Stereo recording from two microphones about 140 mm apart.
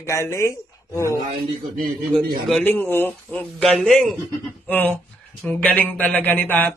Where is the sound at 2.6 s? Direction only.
15° left (ahead or behind).